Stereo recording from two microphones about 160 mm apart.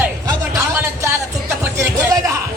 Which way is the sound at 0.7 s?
15° right (ahead or behind).